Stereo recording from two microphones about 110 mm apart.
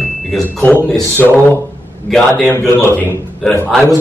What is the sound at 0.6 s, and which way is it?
Speech, 15° left (ahead or behind).